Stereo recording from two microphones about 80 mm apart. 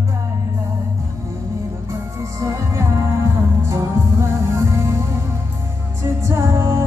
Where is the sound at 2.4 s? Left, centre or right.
Right.